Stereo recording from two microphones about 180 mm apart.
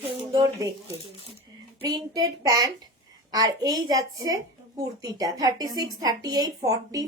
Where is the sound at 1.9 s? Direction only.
20° right (ahead or behind).